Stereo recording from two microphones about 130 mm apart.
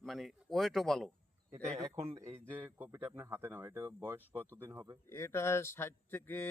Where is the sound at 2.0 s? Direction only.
20° right (ahead or behind).